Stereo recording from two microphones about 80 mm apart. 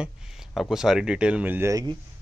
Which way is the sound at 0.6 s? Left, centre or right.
Centre.